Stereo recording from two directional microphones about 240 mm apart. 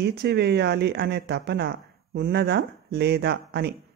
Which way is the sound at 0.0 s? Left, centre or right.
Right.